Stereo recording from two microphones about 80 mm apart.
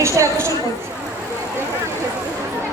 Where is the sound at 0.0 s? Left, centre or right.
Right.